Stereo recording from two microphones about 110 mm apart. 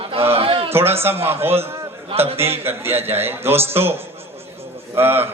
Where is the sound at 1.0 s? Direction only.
20° right (ahead or behind).